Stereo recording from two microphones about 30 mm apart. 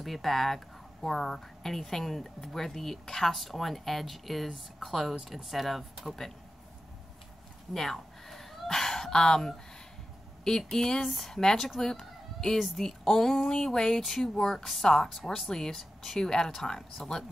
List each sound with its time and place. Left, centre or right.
0.0 s speech: centre
3.3 s speech: centre
7.7 s a sound: centre
8.6 s speech: centre
11.8 s chicken: centre
12.5 s speech: centre
12.8 s speech: centre
16.2 s speech: left